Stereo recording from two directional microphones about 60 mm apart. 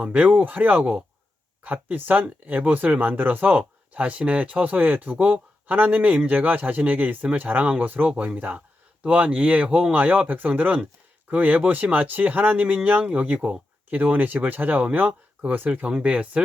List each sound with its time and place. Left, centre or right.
0.0 s speech: right